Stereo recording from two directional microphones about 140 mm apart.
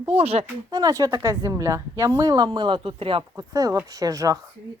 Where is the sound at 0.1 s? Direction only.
50° right (ahead or behind).